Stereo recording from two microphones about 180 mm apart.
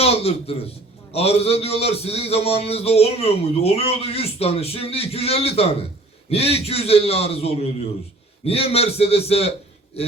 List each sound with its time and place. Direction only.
0.0 s a man's voice: 35° left (ahead or behind)